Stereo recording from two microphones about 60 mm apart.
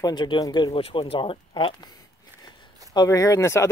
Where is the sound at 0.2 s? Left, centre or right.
Left.